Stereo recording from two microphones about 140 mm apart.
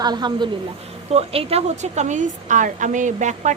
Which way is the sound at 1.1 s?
45° right (ahead or behind).